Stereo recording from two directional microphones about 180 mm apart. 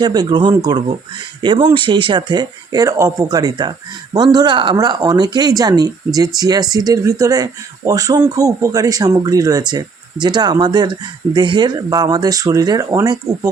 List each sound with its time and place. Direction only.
0.0 s speech: 25° right (ahead or behind)